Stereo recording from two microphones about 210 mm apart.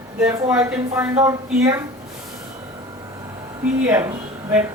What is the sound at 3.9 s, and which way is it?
Speech, 10° right (ahead or behind).